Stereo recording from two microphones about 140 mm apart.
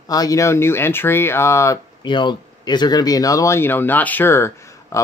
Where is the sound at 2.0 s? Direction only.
35° left (ahead or behind).